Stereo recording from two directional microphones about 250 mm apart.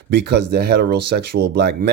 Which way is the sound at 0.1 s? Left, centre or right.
Right.